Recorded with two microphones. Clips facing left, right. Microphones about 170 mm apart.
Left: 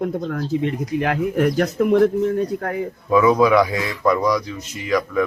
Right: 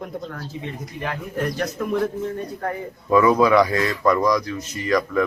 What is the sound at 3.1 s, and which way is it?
A man's voice, 5° left (ahead or behind).